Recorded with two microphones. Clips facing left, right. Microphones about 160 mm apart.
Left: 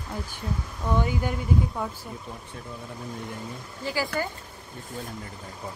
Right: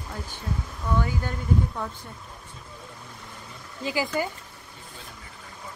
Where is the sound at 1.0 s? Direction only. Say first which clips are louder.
Left 2 dB; 15° left (ahead or behind).